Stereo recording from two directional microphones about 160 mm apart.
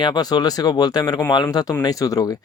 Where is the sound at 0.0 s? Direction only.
25° left (ahead or behind).